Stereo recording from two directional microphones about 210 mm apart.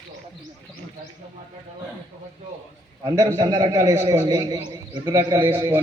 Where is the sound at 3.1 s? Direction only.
20° right (ahead or behind).